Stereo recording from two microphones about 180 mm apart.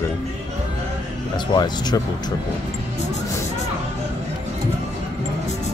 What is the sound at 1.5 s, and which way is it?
Speech, 25° left (ahead or behind).